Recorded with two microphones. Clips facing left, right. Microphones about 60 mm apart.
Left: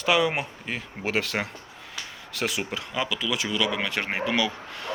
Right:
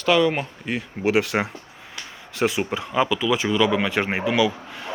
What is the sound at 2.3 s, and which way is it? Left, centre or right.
Speech, right.